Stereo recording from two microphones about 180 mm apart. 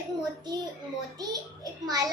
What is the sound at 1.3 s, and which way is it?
Speech, 20° right (ahead or behind).